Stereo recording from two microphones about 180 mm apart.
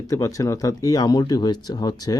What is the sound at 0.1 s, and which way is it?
Speech, 20° left (ahead or behind).